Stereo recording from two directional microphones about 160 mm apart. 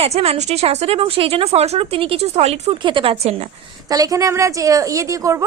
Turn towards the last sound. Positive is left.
turn(degrees=-20)  # may be behind; listen again after turning